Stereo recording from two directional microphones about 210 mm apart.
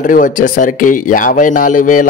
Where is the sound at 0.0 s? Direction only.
40° left (ahead or behind).